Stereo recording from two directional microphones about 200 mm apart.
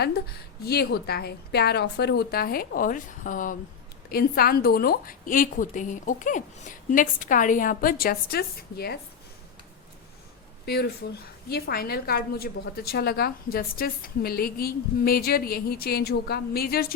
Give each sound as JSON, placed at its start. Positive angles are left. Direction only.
{"t": 0.6, "sound": "a woman's voice", "side_deg": 55}
{"t": 10.7, "sound": "a woman's voice", "side_deg": 50}